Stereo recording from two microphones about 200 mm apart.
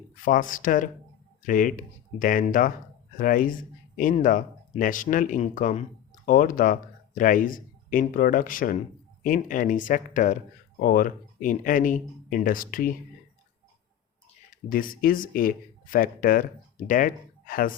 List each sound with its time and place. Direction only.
0.3 s a man's voice: 45° left (ahead or behind)
14.5 s speech: 45° left (ahead or behind)